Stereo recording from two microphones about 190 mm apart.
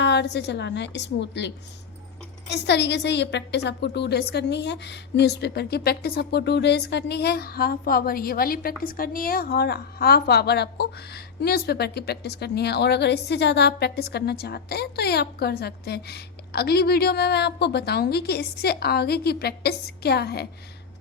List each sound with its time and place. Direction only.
0.0 s a woman's voice: 65° left (ahead or behind)